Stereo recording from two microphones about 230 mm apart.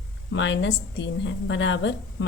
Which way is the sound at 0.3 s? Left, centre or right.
Left.